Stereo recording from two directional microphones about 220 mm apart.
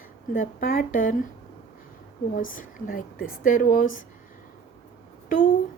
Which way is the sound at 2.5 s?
40° left (ahead or behind).